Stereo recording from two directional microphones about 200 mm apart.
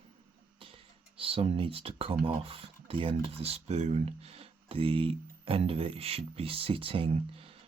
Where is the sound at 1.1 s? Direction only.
30° right (ahead or behind).